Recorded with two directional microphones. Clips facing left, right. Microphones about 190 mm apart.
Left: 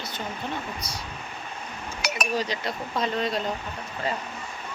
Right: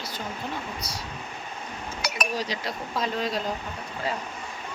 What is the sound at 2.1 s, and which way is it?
Speech, centre (ahead or behind).